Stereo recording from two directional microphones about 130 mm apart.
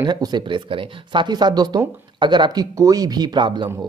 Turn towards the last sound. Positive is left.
turn(degrees=-35)  # may be behind; listen again after turning